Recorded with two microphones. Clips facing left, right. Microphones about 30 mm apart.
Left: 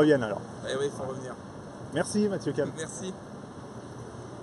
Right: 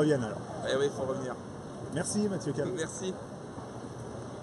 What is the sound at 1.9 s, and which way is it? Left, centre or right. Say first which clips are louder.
Speech: left 5 dB; left.